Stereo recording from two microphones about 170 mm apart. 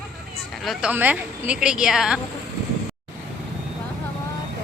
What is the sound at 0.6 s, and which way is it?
A woman's voice, 5° right (ahead or behind).